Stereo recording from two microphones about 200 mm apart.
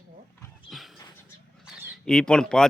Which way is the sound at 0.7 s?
Centre (ahead or behind).